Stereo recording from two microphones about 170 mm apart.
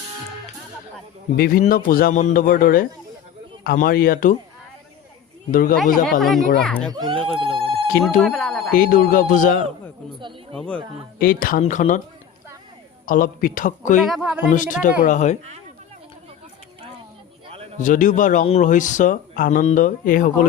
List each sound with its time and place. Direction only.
1.4 s speech: 55° left (ahead or behind)
5.5 s speech: 55° left (ahead or behind)
5.7 s speech: centre (ahead or behind)
6.9 s speech: 30° right (ahead or behind)
8.2 s speech: 5° left (ahead or behind)
8.7 s speech: 55° left (ahead or behind)
10.5 s speech: 5° left (ahead or behind)
11.2 s speech: 60° left (ahead or behind)
13.1 s speech: 55° left (ahead or behind)
14.0 s speech: centre (ahead or behind)
14.5 s speech: 50° left (ahead or behind)
17.7 s speech: 50° left (ahead or behind)